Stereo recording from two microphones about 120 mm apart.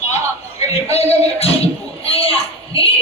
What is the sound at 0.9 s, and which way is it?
Music, 60° left (ahead or behind).